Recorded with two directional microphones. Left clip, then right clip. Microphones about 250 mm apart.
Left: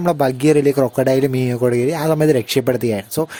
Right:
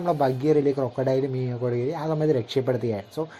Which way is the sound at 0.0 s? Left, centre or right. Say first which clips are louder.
Left 7 dB; left.